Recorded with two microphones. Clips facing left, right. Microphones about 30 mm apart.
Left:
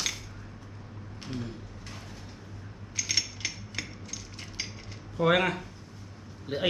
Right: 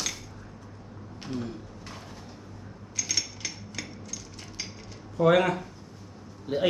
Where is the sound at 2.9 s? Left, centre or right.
Centre.